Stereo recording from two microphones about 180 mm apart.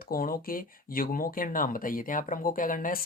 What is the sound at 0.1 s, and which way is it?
Speech, 55° left (ahead or behind).